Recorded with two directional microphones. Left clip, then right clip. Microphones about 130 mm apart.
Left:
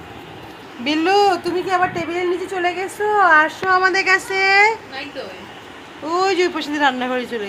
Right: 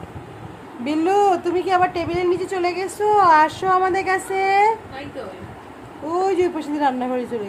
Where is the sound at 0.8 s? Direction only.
Centre (ahead or behind); by 4.7 s 25° right (ahead or behind).